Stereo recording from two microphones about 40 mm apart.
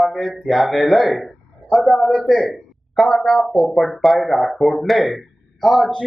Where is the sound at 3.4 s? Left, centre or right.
Centre.